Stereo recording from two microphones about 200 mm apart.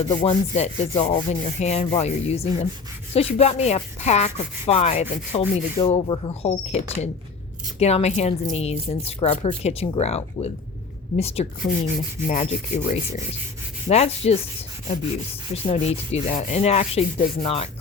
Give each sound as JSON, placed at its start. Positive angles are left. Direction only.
{"t": 0.0, "sound": "rub", "side_deg": 25}
{"t": 15.5, "sound": "rub", "side_deg": 30}